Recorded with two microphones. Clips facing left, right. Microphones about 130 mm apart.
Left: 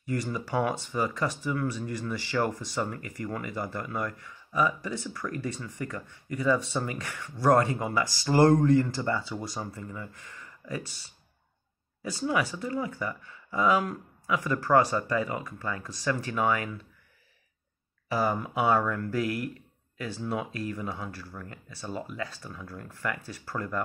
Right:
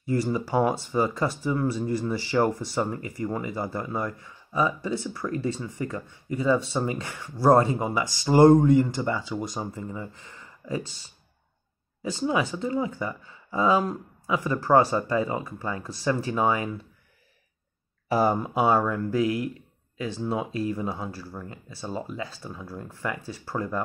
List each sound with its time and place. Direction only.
0.1 s speech: 30° right (ahead or behind)
18.0 s speech: 35° right (ahead or behind)